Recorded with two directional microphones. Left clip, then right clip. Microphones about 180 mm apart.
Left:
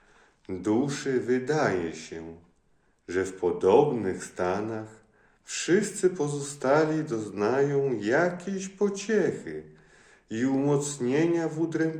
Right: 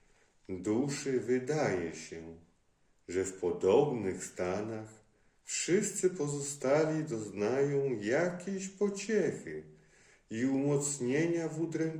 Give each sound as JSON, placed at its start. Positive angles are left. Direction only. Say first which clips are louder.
{"t": 0.4, "sound": "speech", "louder": "left 6 dB", "side_deg": -20}